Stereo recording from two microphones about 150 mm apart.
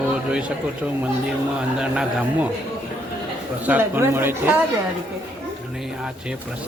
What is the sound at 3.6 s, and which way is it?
Speech, 10° right (ahead or behind).